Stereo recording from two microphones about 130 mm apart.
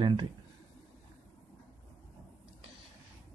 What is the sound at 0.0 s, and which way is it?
Speech, 35° right (ahead or behind).